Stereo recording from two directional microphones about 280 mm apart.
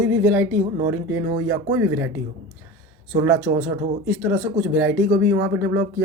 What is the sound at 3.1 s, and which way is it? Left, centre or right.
Speech, centre.